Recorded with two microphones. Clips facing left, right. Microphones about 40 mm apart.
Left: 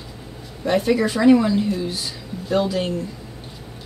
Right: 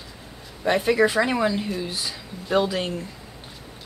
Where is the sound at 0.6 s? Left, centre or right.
Centre.